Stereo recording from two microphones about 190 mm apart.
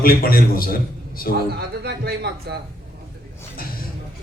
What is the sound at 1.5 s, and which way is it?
A man's voice, 60° right (ahead or behind).